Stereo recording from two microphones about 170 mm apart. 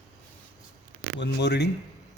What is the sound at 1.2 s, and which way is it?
Speech, 85° left.